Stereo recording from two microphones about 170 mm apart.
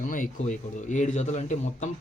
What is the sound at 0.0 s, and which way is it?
A man's voice, 50° left (ahead or behind).